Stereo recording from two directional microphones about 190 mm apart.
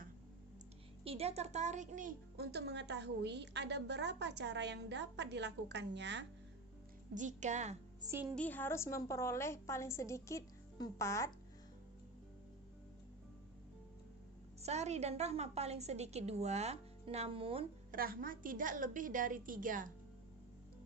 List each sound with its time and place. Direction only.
1.0 s a woman's voice: 30° right (ahead or behind); by 6.2 s 65° right (ahead or behind)
7.1 s a woman's voice: 40° right (ahead or behind)
8.0 s a woman's voice: 15° right (ahead or behind)
8.4 s a woman's voice: 10° left (ahead or behind)
14.6 s a woman's voice: 35° right (ahead or behind)
17.9 s a woman's voice: 50° right (ahead or behind)